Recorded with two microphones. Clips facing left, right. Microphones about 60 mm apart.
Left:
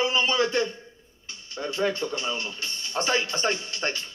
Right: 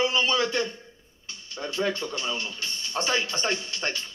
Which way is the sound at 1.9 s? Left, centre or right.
Left.